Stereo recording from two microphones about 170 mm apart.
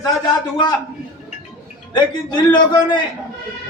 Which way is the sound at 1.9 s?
25° left (ahead or behind).